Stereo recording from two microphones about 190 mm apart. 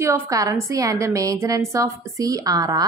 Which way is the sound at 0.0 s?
15° right (ahead or behind).